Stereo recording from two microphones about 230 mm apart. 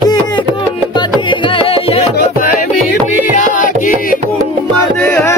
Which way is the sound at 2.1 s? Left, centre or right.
Left.